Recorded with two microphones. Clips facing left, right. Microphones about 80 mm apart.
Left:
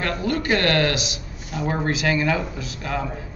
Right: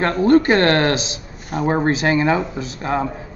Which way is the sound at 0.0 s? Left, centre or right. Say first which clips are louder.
Right 10 dB; right.